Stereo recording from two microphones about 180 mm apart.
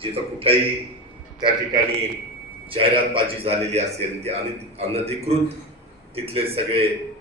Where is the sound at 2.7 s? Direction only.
30° right (ahead or behind).